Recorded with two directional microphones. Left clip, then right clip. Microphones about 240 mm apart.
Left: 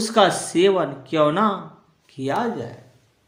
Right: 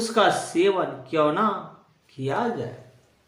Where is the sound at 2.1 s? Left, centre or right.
Left.